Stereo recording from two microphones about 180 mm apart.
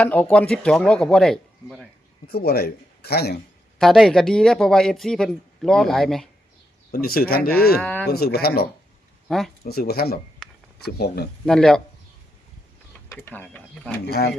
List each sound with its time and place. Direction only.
0.0 s speech: 10° left (ahead or behind)
2.2 s a man's voice: 60° left (ahead or behind)
3.8 s speech: centre (ahead or behind)
6.9 s speech: 55° left (ahead or behind)
7.8 s speech: 5° left (ahead or behind)
8.0 s speech: 60° left (ahead or behind)
9.3 s speech: 5° left (ahead or behind)
9.6 s speech: 60° left (ahead or behind)
11.4 s speech: 5° left (ahead or behind)
13.1 s speech: 10° left (ahead or behind)
14.1 s speech: 65° left (ahead or behind)